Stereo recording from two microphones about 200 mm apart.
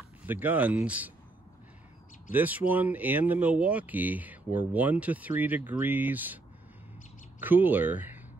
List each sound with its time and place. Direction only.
0.2 s speech: 10° right (ahead or behind)
2.3 s speech: 10° right (ahead or behind)